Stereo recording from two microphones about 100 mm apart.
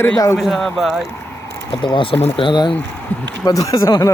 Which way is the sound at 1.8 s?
60° left (ahead or behind).